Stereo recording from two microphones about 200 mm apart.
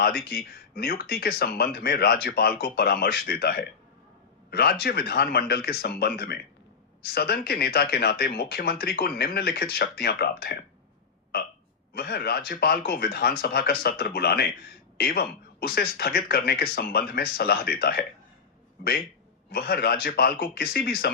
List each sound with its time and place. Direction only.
0.3 s speech: 50° left (ahead or behind)
11.9 s speech: 50° left (ahead or behind)